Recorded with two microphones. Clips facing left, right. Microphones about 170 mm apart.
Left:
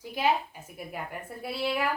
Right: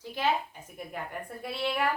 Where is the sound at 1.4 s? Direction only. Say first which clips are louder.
Left 1 dB; 5° left (ahead or behind).